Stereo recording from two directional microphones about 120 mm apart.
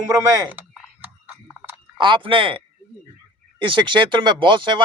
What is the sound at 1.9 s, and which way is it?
Speech, 40° right (ahead or behind).